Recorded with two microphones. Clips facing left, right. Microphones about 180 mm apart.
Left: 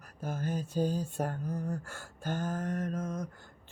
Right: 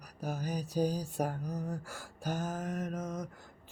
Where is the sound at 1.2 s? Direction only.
Centre (ahead or behind).